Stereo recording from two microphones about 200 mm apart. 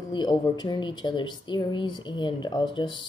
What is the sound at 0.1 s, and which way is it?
Speech, 20° left (ahead or behind).